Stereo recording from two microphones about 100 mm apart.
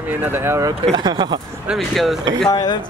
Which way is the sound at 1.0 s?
50° right (ahead or behind).